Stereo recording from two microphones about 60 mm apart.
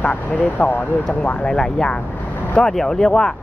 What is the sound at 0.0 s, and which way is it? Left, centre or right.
Speech, left.